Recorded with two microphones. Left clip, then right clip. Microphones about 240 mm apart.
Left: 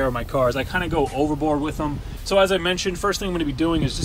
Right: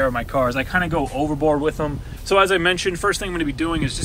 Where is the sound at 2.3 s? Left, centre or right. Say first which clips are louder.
Right 2 dB; centre.